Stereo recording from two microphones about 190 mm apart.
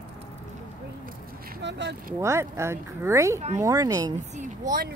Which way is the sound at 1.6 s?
65° right (ahead or behind).